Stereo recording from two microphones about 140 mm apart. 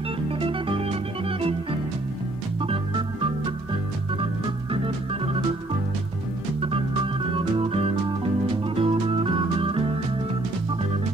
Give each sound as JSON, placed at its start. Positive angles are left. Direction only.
{"t": 0.4, "sound": "music", "side_deg": -40}
{"t": 2.6, "sound": "organ", "side_deg": -40}
{"t": 4.8, "sound": "organ", "side_deg": -40}
{"t": 7.3, "sound": "organ", "side_deg": -40}
{"t": 8.7, "sound": "music", "side_deg": -40}